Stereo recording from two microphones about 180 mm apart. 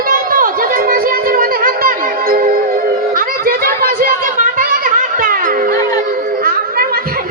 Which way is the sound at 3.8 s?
55° right (ahead or behind).